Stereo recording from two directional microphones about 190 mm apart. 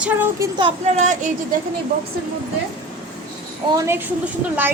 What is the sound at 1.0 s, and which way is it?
Speech, 40° right (ahead or behind).